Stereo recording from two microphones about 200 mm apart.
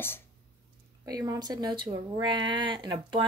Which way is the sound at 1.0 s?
20° right (ahead or behind).